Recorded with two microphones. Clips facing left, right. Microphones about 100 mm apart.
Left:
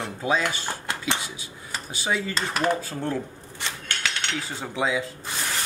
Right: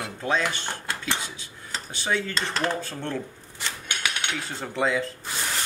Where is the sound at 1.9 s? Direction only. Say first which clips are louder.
Even; 5° left (ahead or behind).